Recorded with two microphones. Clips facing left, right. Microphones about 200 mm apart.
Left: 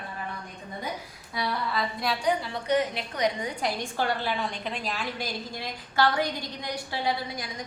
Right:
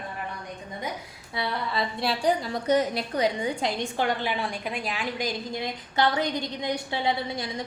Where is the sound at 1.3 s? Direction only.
25° right (ahead or behind).